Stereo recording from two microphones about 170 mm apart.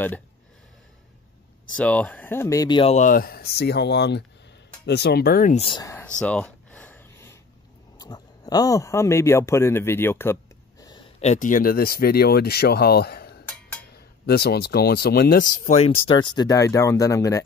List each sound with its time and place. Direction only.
1.8 s speech: 5° left (ahead or behind); by 3.0 s 30° left (ahead or behind)
3.0 s speech: 55° left (ahead or behind)
5.8 s speech: 15° left (ahead or behind)
6.0 s a sound: 5° left (ahead or behind)
8.0 s speech: 25° left (ahead or behind)
11.1 s speech: 45° left (ahead or behind); by 17.4 s 20° left (ahead or behind)